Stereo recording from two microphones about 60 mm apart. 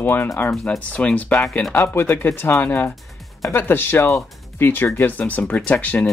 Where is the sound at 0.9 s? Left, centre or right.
Left.